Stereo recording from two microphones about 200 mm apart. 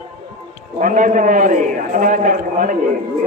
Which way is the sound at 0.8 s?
40° right (ahead or behind).